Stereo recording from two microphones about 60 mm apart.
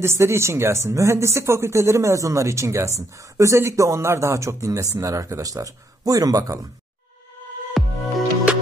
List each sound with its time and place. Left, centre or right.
0.0 s speech: right
7.8 s music: centre